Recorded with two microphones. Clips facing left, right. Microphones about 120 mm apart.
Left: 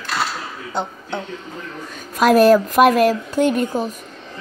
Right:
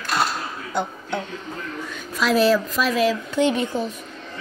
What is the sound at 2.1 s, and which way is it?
Speech, 50° left (ahead or behind).